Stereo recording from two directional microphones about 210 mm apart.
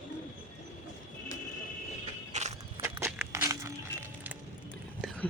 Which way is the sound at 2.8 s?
15° right (ahead or behind).